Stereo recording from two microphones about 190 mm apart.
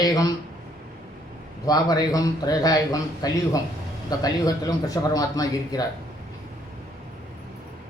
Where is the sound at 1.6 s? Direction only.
20° left (ahead or behind).